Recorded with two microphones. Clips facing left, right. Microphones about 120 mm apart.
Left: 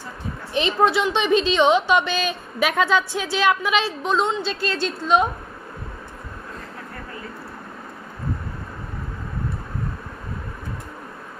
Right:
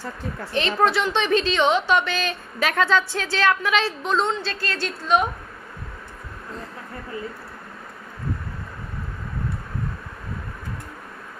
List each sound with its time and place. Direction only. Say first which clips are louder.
0.5 s a woman's voice: left 2 dB; 15° left (ahead or behind)